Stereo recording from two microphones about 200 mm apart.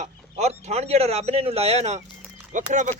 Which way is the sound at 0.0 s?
35° right (ahead or behind).